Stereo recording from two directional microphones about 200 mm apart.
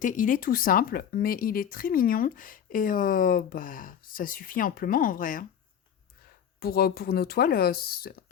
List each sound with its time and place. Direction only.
0.0 s speech: 40° left (ahead or behind)
6.6 s speech: 50° left (ahead or behind)